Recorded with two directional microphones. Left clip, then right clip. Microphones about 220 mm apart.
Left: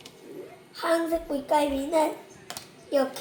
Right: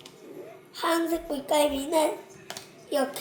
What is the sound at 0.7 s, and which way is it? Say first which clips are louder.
Speech: left 1 dB; 20° right (ahead or behind).